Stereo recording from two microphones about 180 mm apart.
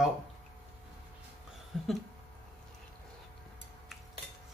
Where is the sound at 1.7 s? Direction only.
Centre (ahead or behind).